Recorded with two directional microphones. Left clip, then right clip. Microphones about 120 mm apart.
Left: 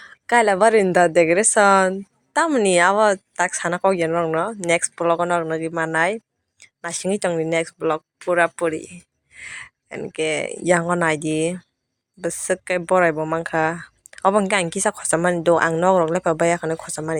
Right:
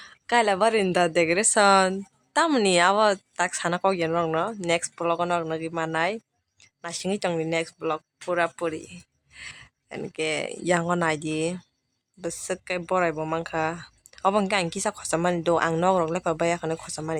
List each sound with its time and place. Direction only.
0.0 s speech: 25° left (ahead or behind)
6.6 s a sound: 40° left (ahead or behind)
7.3 s speech: 20° left (ahead or behind)
7.5 s speech: 30° left (ahead or behind)
9.3 s a sound: 25° left (ahead or behind)
10.1 s speech: 25° left (ahead or behind)